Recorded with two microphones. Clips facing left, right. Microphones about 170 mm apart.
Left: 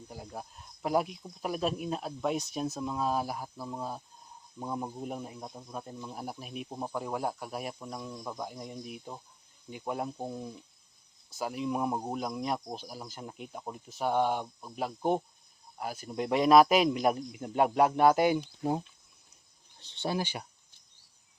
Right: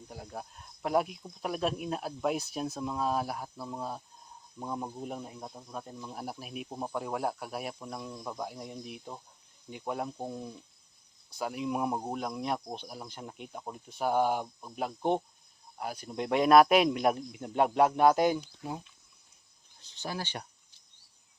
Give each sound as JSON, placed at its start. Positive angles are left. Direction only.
{"t": 0.1, "sound": "speech", "side_deg": 0}
{"t": 19.9, "sound": "speech", "side_deg": 30}
{"t": 20.1, "sound": "speech", "side_deg": 10}